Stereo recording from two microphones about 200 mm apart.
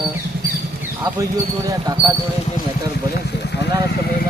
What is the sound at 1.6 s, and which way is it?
Speech, 20° right (ahead or behind).